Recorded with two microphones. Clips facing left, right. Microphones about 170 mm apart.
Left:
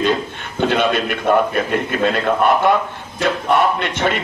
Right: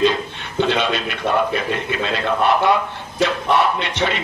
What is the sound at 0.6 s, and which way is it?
A man's voice, 50° left (ahead or behind).